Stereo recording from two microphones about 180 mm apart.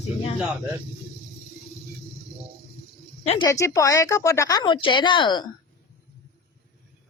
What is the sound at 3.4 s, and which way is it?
Speech, 15° left (ahead or behind).